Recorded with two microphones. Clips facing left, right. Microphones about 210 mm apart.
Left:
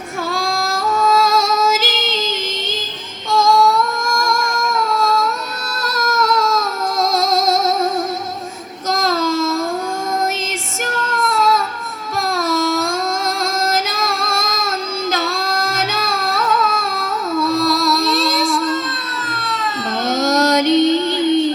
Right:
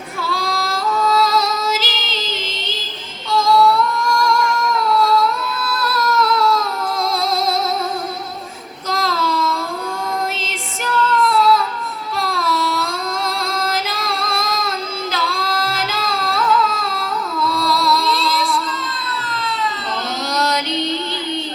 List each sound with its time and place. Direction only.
0.2 s music: 45° left (ahead or behind)
3.3 s child singing: 45° left (ahead or behind)
8.9 s child singing: 45° left (ahead or behind)
10.4 s female singing: 45° left (ahead or behind)
12.2 s baby cry: 45° left (ahead or behind)
13.9 s child singing: 45° left (ahead or behind)
15.1 s music: 45° left (ahead or behind)
20.2 s female singing: 45° left (ahead or behind)